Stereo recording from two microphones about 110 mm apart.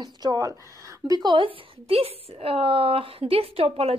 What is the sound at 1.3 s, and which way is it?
A woman's voice, 55° right (ahead or behind).